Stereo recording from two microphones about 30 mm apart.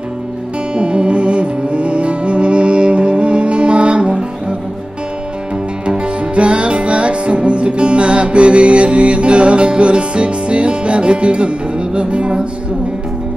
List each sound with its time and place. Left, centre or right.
0.7 s music: right
5.9 s music: right